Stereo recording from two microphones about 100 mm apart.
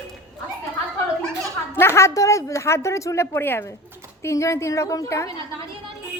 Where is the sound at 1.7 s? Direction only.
25° left (ahead or behind).